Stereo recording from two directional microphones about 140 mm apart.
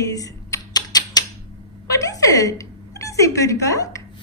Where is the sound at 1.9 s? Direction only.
25° left (ahead or behind).